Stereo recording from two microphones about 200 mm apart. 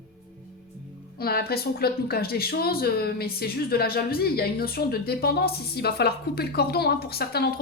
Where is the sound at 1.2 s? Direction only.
50° left (ahead or behind).